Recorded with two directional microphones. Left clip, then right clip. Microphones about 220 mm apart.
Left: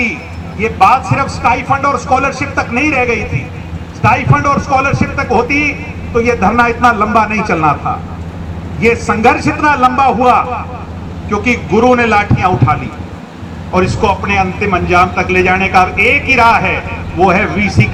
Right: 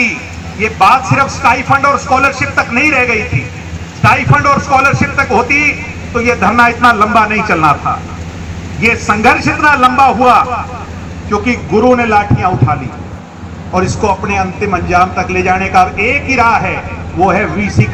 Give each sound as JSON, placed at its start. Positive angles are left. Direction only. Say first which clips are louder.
{"t": 0.6, "sound": "a man's voice", "louder": "right 1 dB", "side_deg": 40}
{"t": 13.7, "sound": "a man's voice", "louder": "even", "side_deg": 45}